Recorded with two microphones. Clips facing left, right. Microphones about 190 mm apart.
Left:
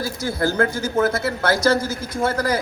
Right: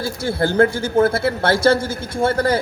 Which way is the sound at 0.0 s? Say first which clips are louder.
Right 2 dB; 30° right (ahead or behind).